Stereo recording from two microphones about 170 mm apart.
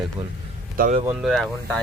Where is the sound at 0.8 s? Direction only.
55° right (ahead or behind).